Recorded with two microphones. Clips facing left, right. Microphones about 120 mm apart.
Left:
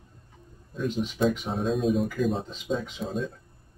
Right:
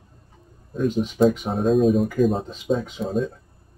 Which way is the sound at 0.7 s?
50° right (ahead or behind).